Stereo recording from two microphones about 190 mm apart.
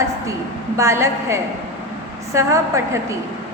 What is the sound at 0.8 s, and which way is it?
A woman's voice, 15° right (ahead or behind).